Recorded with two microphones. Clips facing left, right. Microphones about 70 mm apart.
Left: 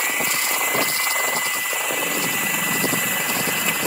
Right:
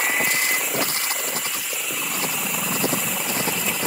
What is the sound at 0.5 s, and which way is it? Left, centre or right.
Helicopter, left.